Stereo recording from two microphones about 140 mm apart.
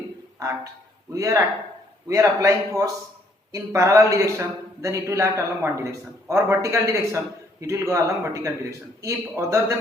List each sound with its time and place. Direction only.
0.3 s a man's voice: 25° right (ahead or behind)